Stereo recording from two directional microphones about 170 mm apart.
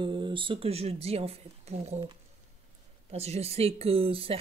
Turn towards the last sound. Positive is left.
turn(degrees=-35)  # may be behind; listen again after turning